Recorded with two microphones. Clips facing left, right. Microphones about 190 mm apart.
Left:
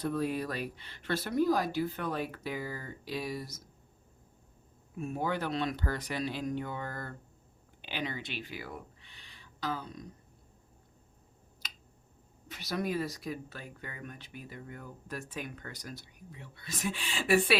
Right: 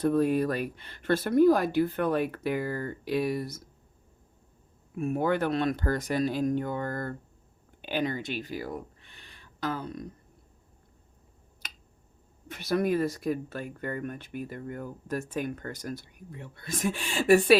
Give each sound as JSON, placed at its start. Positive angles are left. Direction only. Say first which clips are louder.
{"t": 0.0, "sound": "speech", "louder": "right 8 dB", "side_deg": -50}
{"t": 4.9, "sound": "speech", "louder": "right 7 dB", "side_deg": -60}
{"t": 12.5, "sound": "speech", "louder": "right 8 dB", "side_deg": -55}